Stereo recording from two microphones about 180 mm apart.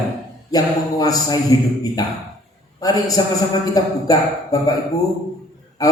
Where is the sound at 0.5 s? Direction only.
20° left (ahead or behind).